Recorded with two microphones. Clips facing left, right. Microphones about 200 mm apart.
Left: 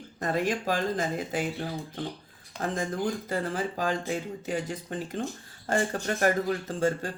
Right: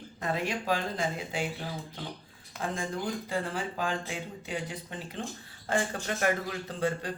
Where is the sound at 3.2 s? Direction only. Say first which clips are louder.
Left 3 dB; 40° left (ahead or behind).